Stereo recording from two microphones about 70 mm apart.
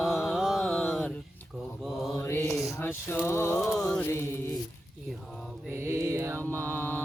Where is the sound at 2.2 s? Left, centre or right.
Left.